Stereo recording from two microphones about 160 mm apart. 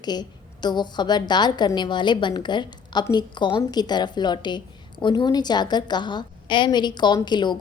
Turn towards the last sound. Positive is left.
turn(degrees=30)  # may be behind; listen again after turning